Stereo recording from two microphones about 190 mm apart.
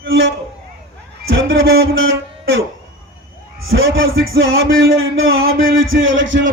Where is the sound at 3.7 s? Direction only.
90° right.